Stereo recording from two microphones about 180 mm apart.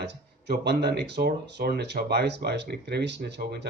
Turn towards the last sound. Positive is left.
turn(degrees=-70)  # may be behind; listen again after turning